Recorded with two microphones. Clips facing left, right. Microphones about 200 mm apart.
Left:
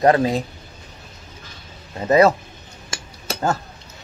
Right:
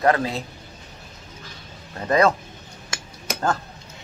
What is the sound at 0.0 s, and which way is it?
Speech, 20° left (ahead or behind).